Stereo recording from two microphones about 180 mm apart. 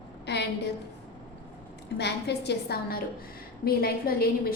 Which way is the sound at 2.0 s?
70° left (ahead or behind).